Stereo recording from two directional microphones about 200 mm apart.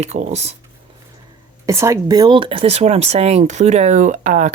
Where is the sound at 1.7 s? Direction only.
15° right (ahead or behind).